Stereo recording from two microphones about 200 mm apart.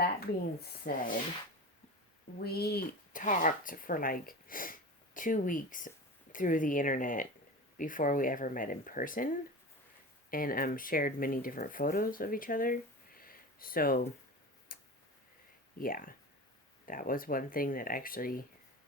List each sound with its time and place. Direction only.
0.6 s speech: 50° left (ahead or behind)
2.4 s speech: 50° left (ahead or behind)
14.7 s tick-tock: 45° left (ahead or behind)
15.8 s speech: 45° left (ahead or behind)